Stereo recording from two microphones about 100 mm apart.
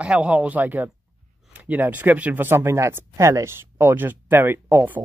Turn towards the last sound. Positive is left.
turn(degrees=-20)  # may be behind; listen again after turning